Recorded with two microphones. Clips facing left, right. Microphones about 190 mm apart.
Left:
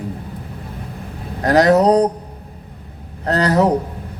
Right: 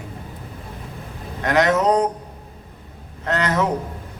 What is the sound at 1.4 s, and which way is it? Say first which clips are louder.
Speech: left 6 dB; 35° left (ahead or behind).